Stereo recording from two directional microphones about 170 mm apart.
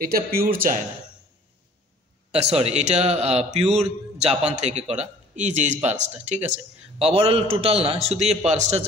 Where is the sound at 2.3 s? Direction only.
40° right (ahead or behind).